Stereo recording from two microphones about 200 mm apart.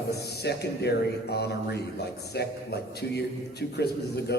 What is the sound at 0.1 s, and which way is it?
A man's voice, 55° left (ahead or behind).